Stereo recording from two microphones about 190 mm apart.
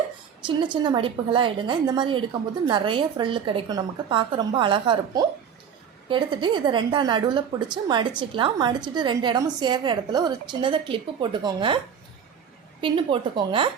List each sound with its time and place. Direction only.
0.4 s a woman's voice: 25° right (ahead or behind)
12.8 s a woman's voice: 25° right (ahead or behind)